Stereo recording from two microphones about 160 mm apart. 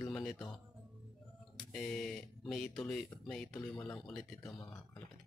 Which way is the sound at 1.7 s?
5° left (ahead or behind).